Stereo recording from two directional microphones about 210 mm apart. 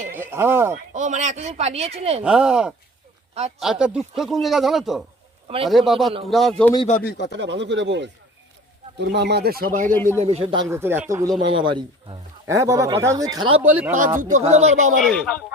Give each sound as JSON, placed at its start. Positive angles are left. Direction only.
{"t": 0.1, "sound": "speech", "side_deg": -10}
{"t": 0.7, "sound": "speech", "side_deg": -35}
{"t": 2.2, "sound": "a man's voice", "side_deg": -5}
{"t": 6.8, "sound": "speech", "side_deg": 45}
{"t": 7.3, "sound": "speech", "side_deg": -55}
{"t": 9.9, "sound": "a man's voice", "side_deg": 10}
{"t": 10.2, "sound": "a man's voice", "side_deg": -30}
{"t": 10.7, "sound": "speech", "side_deg": -10}
{"t": 11.5, "sound": "a man's voice", "side_deg": -25}
{"t": 13.6, "sound": "speech", "side_deg": -10}
{"t": 14.2, "sound": "speech", "side_deg": -35}
{"t": 14.9, "sound": "a man's voice", "side_deg": 0}